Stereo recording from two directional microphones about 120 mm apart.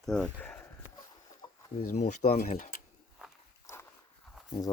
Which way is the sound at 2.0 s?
90° left.